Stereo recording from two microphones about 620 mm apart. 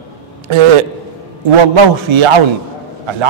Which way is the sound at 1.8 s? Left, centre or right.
Right.